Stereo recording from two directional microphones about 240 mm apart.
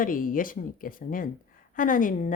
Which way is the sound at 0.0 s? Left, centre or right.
Left.